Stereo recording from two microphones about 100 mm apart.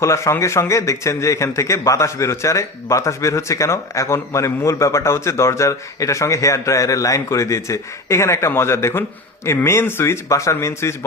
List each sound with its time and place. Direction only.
0.0 s a man's voice: 30° left (ahead or behind)